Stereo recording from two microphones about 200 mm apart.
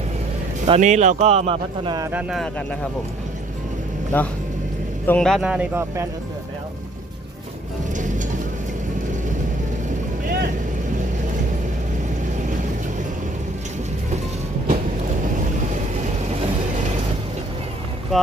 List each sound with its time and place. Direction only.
0.7 s speech: 35° right (ahead or behind); by 2.2 s 15° right (ahead or behind)
2.3 s speech: centre (ahead or behind)
4.1 s speech: 10° left (ahead or behind); by 6.1 s 10° right (ahead or behind)
7.9 s music: 40° right (ahead or behind)
15.7 s vehicle: 35° right (ahead or behind)
18.1 s speech: centre (ahead or behind)